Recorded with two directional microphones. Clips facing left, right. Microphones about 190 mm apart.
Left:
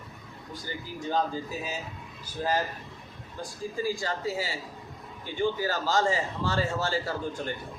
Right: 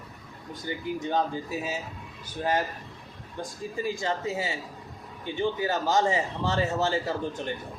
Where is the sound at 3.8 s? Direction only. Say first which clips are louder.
Right 2 dB; 20° right (ahead or behind).